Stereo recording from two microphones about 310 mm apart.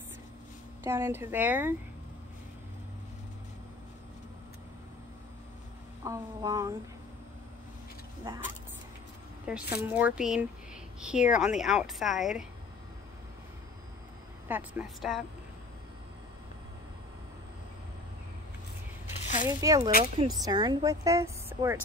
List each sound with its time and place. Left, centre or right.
0.8 s a woman's voice: centre
6.0 s a woman's voice: centre
8.3 s a woman's voice: centre
9.5 s a woman's voice: centre
14.5 s a woman's voice: centre
19.2 s a sound: left
19.6 s a woman's voice: centre